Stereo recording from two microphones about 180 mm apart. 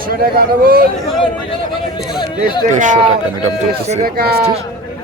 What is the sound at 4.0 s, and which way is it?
Speech, 60° right (ahead or behind).